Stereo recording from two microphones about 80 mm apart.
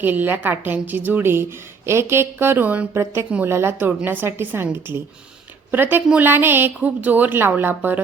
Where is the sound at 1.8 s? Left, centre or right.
Right.